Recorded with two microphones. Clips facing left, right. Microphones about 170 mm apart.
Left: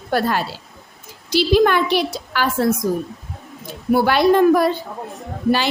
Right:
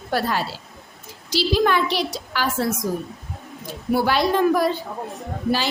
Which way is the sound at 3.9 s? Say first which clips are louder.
Left 5 dB; 60° left (ahead or behind).